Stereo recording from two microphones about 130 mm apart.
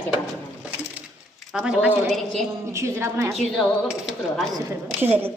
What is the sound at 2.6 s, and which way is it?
Speech, 20° right (ahead or behind).